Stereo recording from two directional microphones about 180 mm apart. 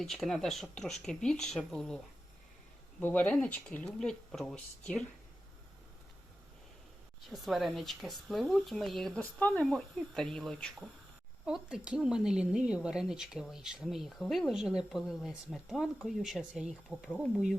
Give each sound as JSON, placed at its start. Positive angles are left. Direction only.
{"t": 0.0, "sound": "speech", "side_deg": 0}
{"t": 3.0, "sound": "speech", "side_deg": 10}
{"t": 7.3, "sound": "speech", "side_deg": 0}